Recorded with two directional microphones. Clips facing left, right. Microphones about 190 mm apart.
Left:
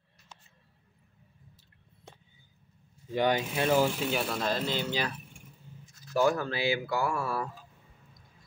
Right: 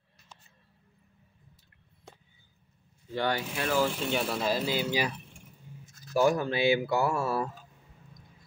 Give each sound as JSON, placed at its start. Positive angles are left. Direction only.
{"t": 3.1, "sound": "speech", "side_deg": 15}
{"t": 4.1, "sound": "speech", "side_deg": -5}
{"t": 6.1, "sound": "speech", "side_deg": -15}